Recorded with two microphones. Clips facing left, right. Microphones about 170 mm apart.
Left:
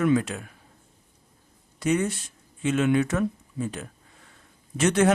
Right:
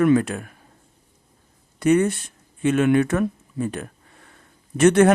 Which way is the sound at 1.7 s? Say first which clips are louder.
Right 7 dB; 55° right (ahead or behind).